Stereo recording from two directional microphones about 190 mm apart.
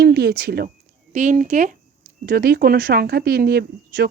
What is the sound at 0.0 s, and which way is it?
Speech, 55° right (ahead or behind).